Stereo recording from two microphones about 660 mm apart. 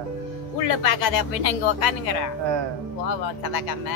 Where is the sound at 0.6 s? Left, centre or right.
Left.